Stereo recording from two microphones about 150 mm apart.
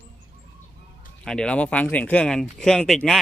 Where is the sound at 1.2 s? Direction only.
5° left (ahead or behind).